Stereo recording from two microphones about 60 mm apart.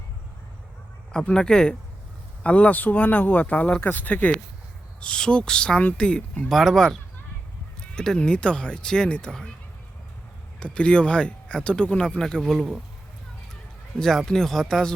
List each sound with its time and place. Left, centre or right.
1.1 s speech: centre
3.8 s speech: left
4.0 s speech: left
6.5 s speech: centre
10.6 s speech: centre
14.0 s speech: centre